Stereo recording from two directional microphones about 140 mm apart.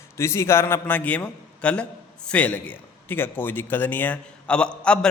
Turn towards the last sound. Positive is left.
turn(degrees=5)  # may be behind; listen again after turning